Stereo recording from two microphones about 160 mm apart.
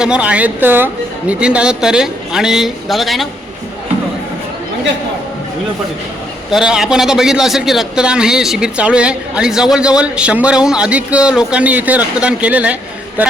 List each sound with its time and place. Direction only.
0.0 s a man's voice: 5° right (ahead or behind)
6.5 s a man's voice: 5° right (ahead or behind)
13.2 s a sound: 10° right (ahead or behind)